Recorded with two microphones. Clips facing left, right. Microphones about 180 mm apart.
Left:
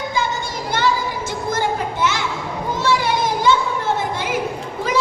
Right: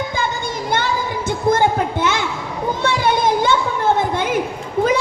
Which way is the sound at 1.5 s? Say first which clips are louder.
Right 6 dB; 55° right (ahead or behind).